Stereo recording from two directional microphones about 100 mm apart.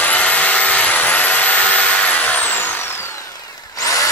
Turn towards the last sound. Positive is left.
turn(degrees=35)  # may be behind; listen again after turning